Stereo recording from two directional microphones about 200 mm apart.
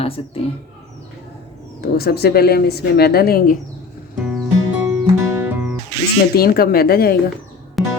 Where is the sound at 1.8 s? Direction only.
50° left (ahead or behind).